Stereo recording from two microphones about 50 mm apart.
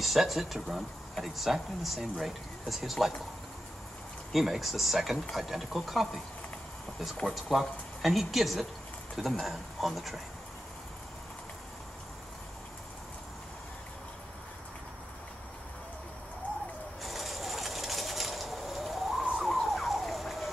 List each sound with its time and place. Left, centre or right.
0.0 s speech: centre
4.3 s speech: centre
7.5 s speech: centre
17.0 s a sound: centre
19.3 s fowl: centre